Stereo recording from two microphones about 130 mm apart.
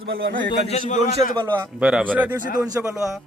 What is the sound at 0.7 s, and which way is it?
Speech, 60° left (ahead or behind).